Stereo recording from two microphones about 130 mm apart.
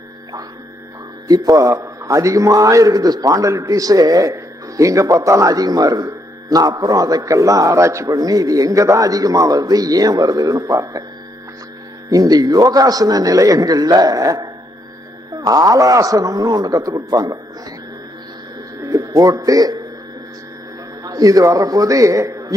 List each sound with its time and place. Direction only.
1.3 s a man's voice: 25° right (ahead or behind)
12.1 s a man's voice: 30° right (ahead or behind)
18.8 s speech: 25° right (ahead or behind)
21.0 s a man's voice: 30° right (ahead or behind)